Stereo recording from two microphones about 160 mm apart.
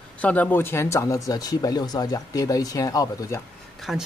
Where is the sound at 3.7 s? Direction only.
Centre (ahead or behind).